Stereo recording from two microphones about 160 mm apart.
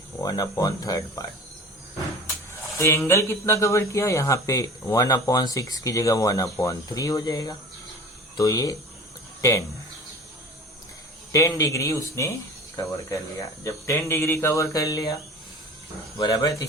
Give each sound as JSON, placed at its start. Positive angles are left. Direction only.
{"t": 0.2, "sound": "speech", "side_deg": 25}
{"t": 2.7, "sound": "speech", "side_deg": 15}
{"t": 11.3, "sound": "speech", "side_deg": 20}
{"t": 16.1, "sound": "speech", "side_deg": 25}